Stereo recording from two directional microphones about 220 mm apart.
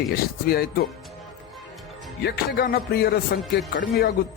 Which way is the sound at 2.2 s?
45° left (ahead or behind).